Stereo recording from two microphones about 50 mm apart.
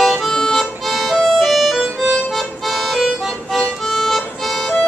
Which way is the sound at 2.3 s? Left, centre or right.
Centre.